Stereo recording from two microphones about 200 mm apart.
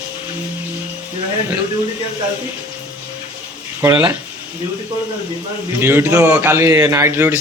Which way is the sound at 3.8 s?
10° right (ahead or behind).